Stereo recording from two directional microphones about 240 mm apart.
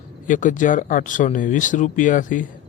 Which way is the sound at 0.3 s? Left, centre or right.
Left.